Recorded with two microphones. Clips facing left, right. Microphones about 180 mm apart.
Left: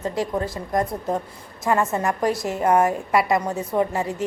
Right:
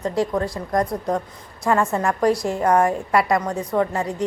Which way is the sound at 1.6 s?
Centre (ahead or behind).